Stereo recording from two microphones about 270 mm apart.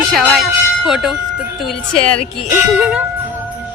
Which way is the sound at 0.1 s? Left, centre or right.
Centre.